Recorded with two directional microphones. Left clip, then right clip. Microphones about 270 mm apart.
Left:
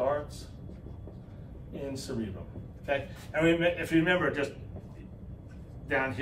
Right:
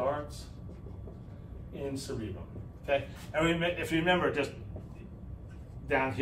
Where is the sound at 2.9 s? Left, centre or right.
Centre.